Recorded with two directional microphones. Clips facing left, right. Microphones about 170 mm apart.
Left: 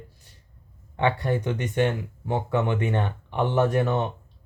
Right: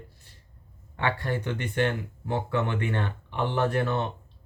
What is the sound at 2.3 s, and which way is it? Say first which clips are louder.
Speech: left 3 dB; 15° left (ahead or behind).